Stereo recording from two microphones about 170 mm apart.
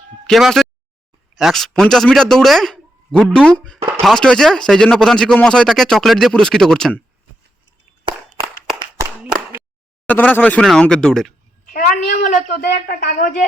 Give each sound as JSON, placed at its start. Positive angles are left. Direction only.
{"t": 0.3, "sound": "a man's voice", "side_deg": 0}
{"t": 3.8, "sound": "speech", "side_deg": -20}
{"t": 4.0, "sound": "speech", "side_deg": 5}
{"t": 8.1, "sound": "a sound", "side_deg": -25}
{"t": 9.0, "sound": "clapping", "side_deg": -10}
{"t": 10.1, "sound": "speech", "side_deg": 10}
{"t": 11.7, "sound": "a woman's voice", "side_deg": 55}